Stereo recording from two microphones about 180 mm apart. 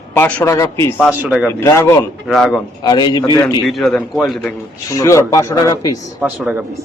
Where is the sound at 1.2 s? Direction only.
5° right (ahead or behind).